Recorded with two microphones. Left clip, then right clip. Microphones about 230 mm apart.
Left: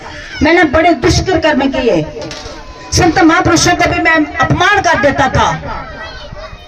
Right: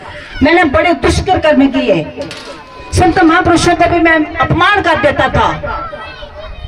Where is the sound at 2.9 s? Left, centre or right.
Left.